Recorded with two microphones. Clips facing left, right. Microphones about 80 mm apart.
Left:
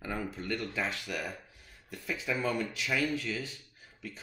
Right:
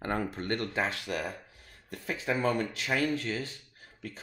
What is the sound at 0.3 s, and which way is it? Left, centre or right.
Speech, right.